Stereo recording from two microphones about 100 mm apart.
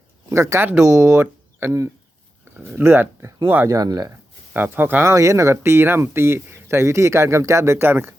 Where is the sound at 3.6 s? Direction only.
40° right (ahead or behind).